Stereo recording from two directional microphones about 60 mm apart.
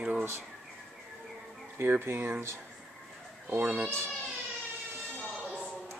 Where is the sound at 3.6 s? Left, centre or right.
Right.